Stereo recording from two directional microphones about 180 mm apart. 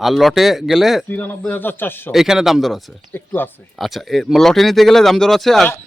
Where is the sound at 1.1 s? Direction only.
10° left (ahead or behind).